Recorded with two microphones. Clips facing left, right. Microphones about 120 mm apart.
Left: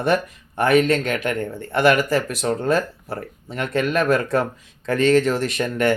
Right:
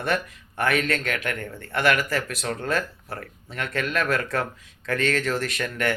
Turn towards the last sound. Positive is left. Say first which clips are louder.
# left 6 dB
turn(degrees=25)  # may be behind; listen again after turning